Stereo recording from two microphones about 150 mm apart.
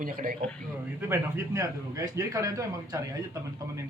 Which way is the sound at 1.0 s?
15° right (ahead or behind).